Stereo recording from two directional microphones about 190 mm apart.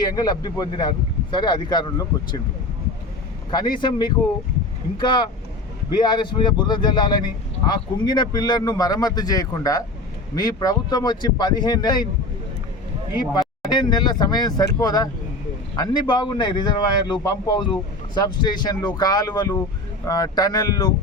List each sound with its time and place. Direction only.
0.0 s speech: 20° left (ahead or behind)
3.5 s speech: 20° left (ahead or behind)
13.7 s speech: 25° left (ahead or behind)